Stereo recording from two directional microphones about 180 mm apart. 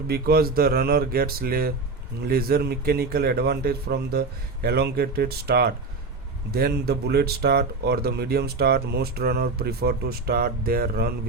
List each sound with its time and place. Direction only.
0.1 s speech: 60° right (ahead or behind)